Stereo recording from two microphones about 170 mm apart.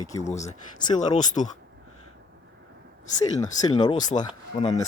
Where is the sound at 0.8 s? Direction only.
45° left (ahead or behind).